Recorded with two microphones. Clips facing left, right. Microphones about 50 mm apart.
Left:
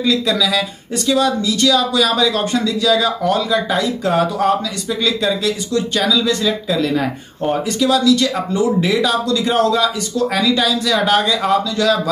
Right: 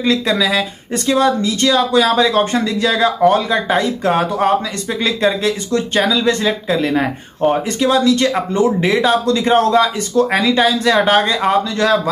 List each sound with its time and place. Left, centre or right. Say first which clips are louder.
0.0 s speech: right 1 dB; right